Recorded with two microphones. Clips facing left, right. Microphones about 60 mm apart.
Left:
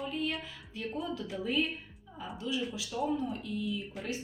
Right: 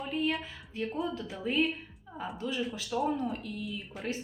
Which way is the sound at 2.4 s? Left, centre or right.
Right.